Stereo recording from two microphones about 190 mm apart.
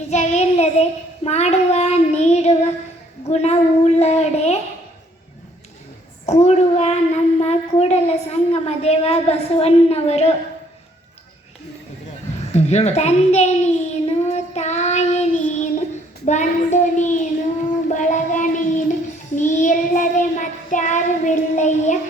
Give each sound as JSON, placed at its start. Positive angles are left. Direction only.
{"t": 0.1, "sound": "child singing", "side_deg": 35}
{"t": 3.2, "sound": "a sound", "side_deg": 35}
{"t": 6.2, "sound": "child singing", "side_deg": 35}
{"t": 12.5, "sound": "child singing", "side_deg": 35}